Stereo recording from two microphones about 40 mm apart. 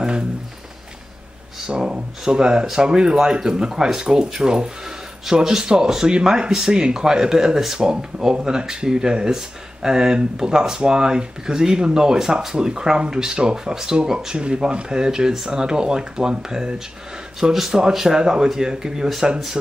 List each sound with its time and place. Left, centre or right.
1.7 s speech: centre